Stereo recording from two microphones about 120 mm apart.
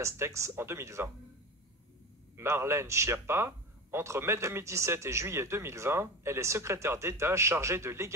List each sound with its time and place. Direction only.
0.0 s a man's voice: 25° right (ahead or behind)
2.3 s a man's voice: 20° right (ahead or behind)